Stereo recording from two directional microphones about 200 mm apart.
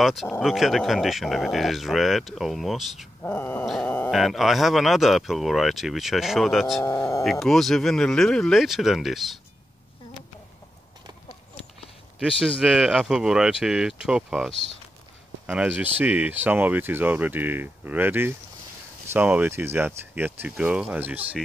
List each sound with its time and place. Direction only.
0.0 s speech: centre (ahead or behind)
12.2 s speech: 5° right (ahead or behind)